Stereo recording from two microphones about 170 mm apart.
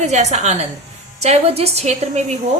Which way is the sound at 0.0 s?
40° right (ahead or behind).